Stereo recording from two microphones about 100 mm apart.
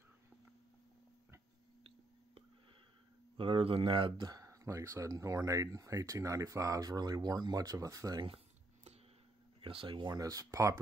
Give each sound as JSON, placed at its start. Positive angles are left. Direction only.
{"t": 3.3, "sound": "speech", "side_deg": -60}
{"t": 4.3, "sound": "speech", "side_deg": -35}
{"t": 9.6, "sound": "speech", "side_deg": -60}
{"t": 10.0, "sound": "speech", "side_deg": -40}